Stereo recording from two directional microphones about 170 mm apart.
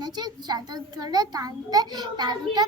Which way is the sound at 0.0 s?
25° right (ahead or behind).